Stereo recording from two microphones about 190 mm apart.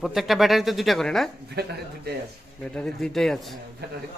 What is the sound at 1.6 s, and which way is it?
Speech, 60° right (ahead or behind).